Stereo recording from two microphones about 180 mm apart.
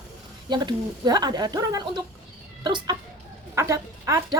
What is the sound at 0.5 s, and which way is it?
A woman's voice, 25° right (ahead or behind).